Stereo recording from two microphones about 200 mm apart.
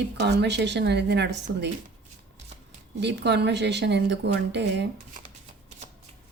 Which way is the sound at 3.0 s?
60° right (ahead or behind).